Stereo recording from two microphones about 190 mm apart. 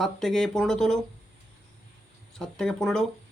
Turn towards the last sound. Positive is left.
turn(degrees=5)  # may be behind; listen again after turning